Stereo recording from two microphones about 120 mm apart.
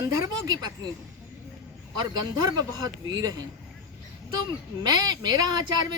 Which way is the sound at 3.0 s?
35° right (ahead or behind).